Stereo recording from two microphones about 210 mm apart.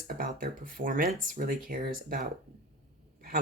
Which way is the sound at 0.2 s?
40° right (ahead or behind).